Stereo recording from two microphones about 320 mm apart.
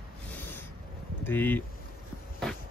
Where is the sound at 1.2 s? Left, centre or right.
Centre.